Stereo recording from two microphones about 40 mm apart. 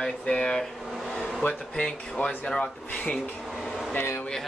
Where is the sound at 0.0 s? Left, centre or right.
Left.